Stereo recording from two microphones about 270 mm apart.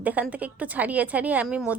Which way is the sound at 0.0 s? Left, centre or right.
Centre.